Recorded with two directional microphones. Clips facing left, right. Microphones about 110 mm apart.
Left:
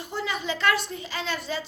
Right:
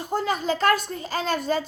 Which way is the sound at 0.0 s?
45° right (ahead or behind).